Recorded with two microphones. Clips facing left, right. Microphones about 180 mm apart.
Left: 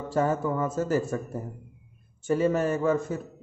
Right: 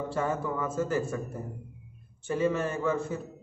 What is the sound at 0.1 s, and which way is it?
A man's voice, 40° left (ahead or behind).